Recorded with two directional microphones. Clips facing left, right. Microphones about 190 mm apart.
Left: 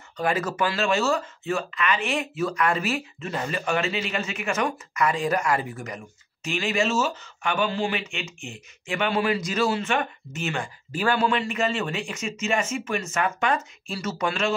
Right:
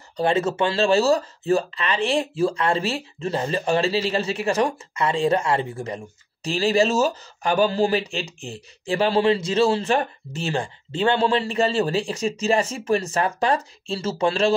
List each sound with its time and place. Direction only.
0.2 s speech: 25° right (ahead or behind)